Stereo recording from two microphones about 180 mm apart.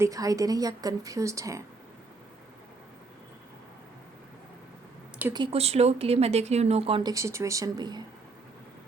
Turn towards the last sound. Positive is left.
turn(degrees=-25)  # may be behind; listen again after turning